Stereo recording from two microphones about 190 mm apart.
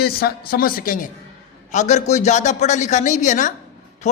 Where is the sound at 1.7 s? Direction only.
40° left (ahead or behind).